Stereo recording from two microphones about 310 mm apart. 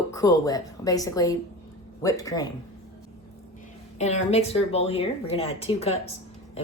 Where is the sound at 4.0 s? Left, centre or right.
Left.